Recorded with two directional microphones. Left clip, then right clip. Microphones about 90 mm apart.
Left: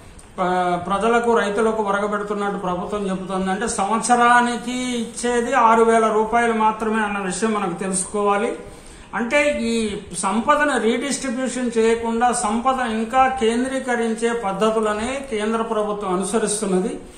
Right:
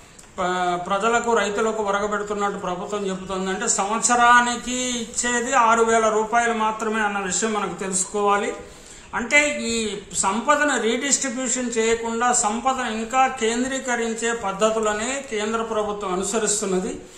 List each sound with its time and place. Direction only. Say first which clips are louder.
0.4 s a man's voice: left 3 dB; 25° right (ahead or behind)